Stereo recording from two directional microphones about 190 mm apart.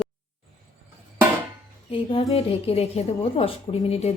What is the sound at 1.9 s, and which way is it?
A woman's voice, 30° left (ahead or behind).